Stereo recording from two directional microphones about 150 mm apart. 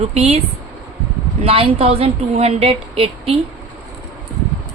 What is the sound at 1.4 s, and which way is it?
A woman's voice, 40° right (ahead or behind).